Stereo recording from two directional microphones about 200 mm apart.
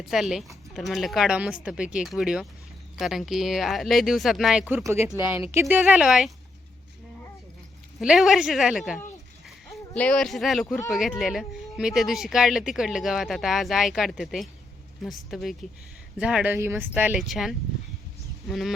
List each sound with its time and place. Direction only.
0.0 s speech: centre (ahead or behind)
7.9 s speech: centre (ahead or behind)